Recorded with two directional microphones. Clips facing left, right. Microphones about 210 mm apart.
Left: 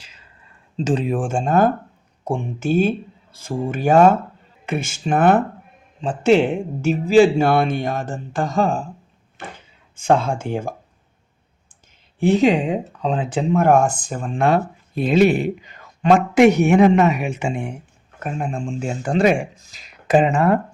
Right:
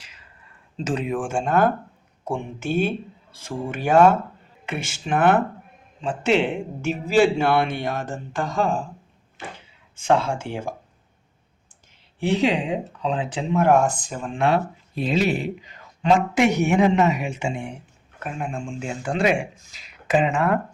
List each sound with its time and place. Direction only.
0.8 s speech: 30° left (ahead or behind)
9.4 s wood: 55° left (ahead or behind)
10.0 s speech: 45° left (ahead or behind)
12.2 s speech: 45° left (ahead or behind)
18.2 s speech: 40° left (ahead or behind)